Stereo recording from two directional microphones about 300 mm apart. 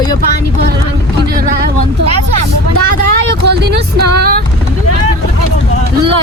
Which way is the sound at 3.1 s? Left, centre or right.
Right.